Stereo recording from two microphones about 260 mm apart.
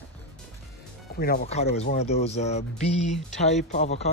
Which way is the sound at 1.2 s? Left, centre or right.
Left.